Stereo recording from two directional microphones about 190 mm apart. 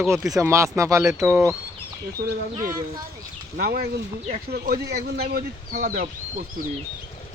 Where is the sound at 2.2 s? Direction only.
50° right (ahead or behind).